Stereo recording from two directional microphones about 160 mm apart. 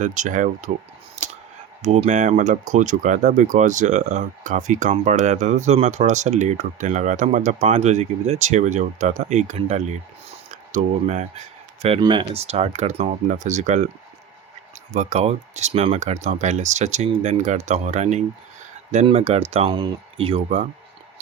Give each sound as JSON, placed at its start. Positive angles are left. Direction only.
{"t": 0.0, "sound": "speech", "side_deg": -50}
{"t": 1.1, "sound": "a sound", "side_deg": -45}
{"t": 1.8, "sound": "speech", "side_deg": -45}
{"t": 11.9, "sound": "speech", "side_deg": -30}
{"t": 14.9, "sound": "speech", "side_deg": -45}